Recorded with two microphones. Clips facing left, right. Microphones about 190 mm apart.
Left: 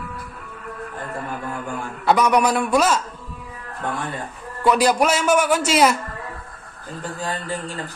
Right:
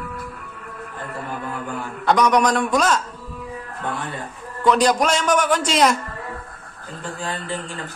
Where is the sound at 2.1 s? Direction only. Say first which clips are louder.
Even; 5° left (ahead or behind).